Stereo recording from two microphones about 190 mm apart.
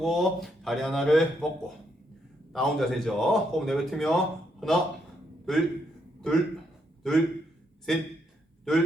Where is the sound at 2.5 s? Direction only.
Centre (ahead or behind).